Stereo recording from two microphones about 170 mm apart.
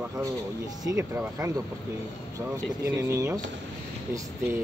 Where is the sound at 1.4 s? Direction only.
20° right (ahead or behind).